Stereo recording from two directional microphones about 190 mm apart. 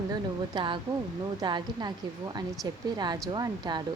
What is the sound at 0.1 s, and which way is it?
A woman's voice, 25° right (ahead or behind).